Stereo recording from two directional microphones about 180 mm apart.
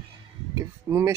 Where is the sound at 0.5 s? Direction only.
15° right (ahead or behind).